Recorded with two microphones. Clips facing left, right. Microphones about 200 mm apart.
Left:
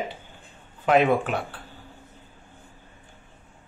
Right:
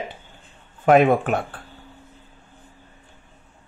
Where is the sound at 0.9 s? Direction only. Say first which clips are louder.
Right 4 dB; 50° right (ahead or behind).